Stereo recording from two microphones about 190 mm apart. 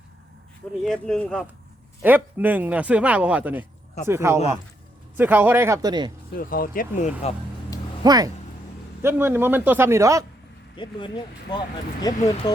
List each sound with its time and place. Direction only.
0.9 s speech: 5° left (ahead or behind)
2.0 s speech: 10° right (ahead or behind)
6.4 s speech: 50° left (ahead or behind)
8.0 s speech: 20° right (ahead or behind)
10.8 s speech: 25° left (ahead or behind)